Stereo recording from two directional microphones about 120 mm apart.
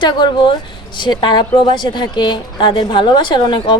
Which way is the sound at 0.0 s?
40° left (ahead or behind).